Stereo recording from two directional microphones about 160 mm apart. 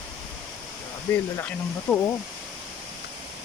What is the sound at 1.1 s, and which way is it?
Speech, 15° left (ahead or behind).